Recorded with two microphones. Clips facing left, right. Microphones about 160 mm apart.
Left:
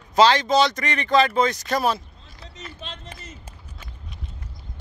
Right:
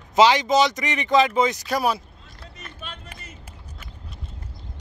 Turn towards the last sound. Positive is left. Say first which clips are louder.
# even
turn(degrees=-10)  # may be behind; listen again after turning